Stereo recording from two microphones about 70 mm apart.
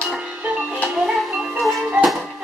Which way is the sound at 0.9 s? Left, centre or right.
Centre.